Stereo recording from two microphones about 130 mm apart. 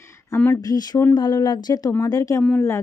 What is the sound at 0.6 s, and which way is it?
Speech, 30° left (ahead or behind).